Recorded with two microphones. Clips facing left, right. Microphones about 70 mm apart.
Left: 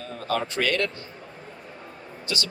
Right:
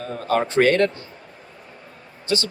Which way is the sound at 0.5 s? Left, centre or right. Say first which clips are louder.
Right 11 dB; right.